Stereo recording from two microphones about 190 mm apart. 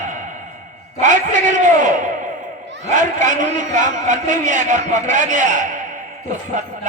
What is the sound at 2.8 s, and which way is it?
A man's voice, 40° right (ahead or behind).